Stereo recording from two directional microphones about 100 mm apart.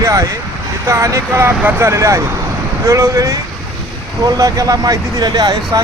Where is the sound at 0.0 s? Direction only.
35° right (ahead or behind).